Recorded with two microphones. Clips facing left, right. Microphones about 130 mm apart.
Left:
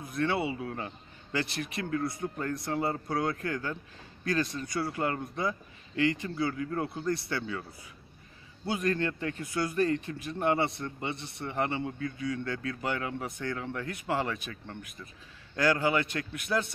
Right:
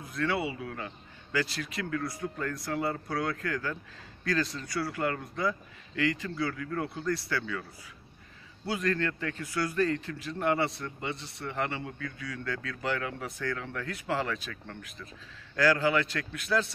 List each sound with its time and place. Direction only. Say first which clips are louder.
0.1 s speech: left 1 dB; 25° left (ahead or behind)
8.6 s speech: even; 20° left (ahead or behind)